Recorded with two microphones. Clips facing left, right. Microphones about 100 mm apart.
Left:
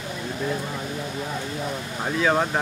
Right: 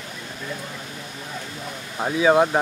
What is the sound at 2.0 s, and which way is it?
Speech, 10° right (ahead or behind).